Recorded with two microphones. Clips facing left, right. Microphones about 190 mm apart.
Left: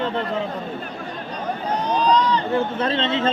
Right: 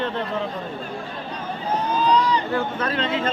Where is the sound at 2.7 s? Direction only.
25° left (ahead or behind).